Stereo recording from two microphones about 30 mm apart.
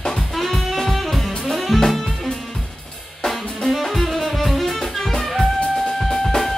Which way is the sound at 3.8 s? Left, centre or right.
Centre.